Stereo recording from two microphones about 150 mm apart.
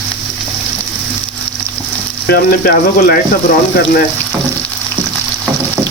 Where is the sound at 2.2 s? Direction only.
90° left.